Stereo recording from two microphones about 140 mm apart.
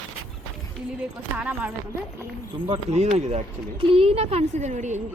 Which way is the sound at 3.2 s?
50° right (ahead or behind).